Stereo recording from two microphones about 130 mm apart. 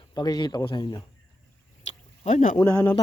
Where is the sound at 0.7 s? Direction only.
35° left (ahead or behind).